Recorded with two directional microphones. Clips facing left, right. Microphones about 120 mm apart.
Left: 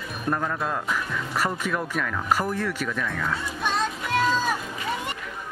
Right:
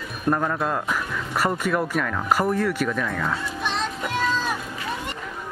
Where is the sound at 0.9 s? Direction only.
15° right (ahead or behind).